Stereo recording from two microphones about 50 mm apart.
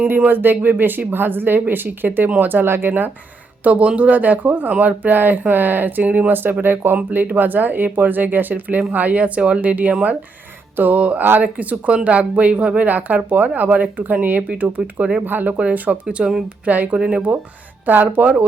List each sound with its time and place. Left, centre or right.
0.3 s speech: right
3.6 s speech: right
15.3 s speech: right
15.5 s speech: right
16.0 s speech: centre
16.6 s speech: right
16.9 s speech: centre
17.8 s speech: right